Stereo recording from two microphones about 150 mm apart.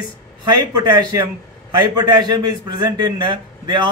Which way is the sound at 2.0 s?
25° right (ahead or behind).